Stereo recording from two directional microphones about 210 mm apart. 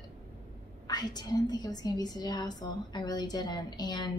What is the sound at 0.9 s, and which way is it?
A woman's voice, 20° left (ahead or behind).